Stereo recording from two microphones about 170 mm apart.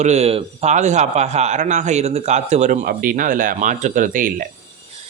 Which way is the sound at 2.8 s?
55° right (ahead or behind).